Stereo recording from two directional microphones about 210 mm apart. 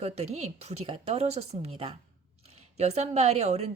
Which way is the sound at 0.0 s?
30° right (ahead or behind).